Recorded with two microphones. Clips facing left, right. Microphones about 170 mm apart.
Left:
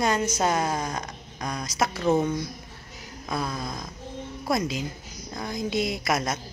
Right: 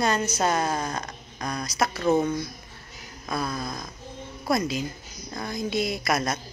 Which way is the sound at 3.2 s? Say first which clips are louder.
Even; 20° left (ahead or behind).